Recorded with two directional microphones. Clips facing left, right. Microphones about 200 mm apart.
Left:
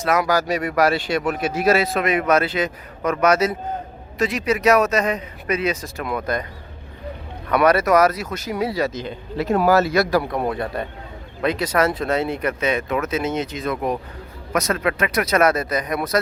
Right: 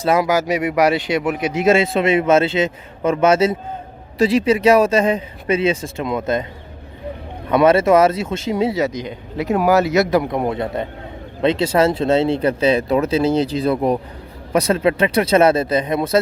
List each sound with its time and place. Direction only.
0.0 s speech: 25° right (ahead or behind)
7.4 s speech: 25° right (ahead or behind)